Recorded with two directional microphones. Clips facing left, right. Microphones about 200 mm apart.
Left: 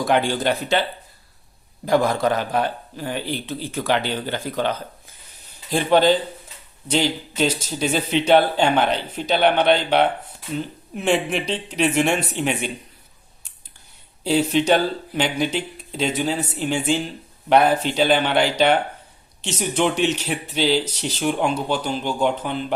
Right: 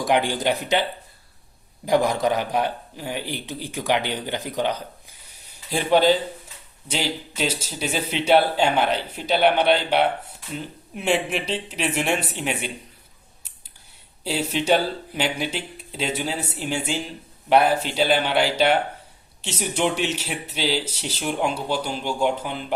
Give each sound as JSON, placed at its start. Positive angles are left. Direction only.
{"t": 0.0, "sound": "speech", "side_deg": -15}
{"t": 14.5, "sound": "speech", "side_deg": -5}